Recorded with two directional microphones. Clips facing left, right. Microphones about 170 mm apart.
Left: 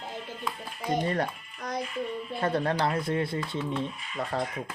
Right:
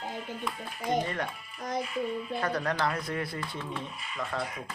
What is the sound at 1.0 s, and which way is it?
Speech, 35° left (ahead or behind).